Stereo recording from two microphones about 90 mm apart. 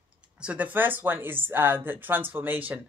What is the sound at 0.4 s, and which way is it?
Speech, 15° right (ahead or behind).